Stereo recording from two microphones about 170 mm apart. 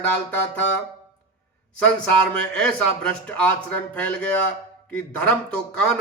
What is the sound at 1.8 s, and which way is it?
A man's voice, 5° left (ahead or behind).